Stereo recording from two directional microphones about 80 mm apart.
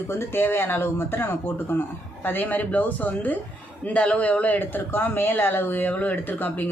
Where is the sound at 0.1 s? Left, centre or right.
Left.